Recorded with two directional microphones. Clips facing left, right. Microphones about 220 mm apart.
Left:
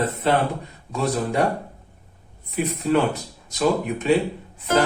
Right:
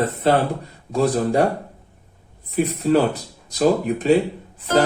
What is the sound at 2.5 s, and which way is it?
Speech, 35° right (ahead or behind).